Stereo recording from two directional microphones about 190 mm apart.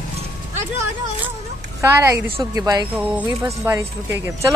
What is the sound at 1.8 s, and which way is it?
Speech, 15° right (ahead or behind).